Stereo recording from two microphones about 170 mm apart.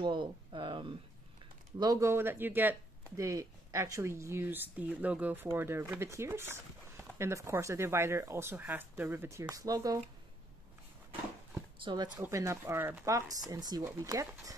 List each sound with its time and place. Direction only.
0.0 s speech: 30° right (ahead or behind)
11.8 s speech: 25° right (ahead or behind)